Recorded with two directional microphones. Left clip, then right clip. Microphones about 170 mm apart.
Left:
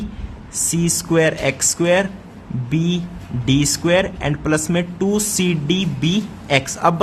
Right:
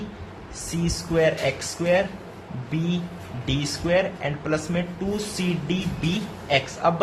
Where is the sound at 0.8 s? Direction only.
45° left (ahead or behind).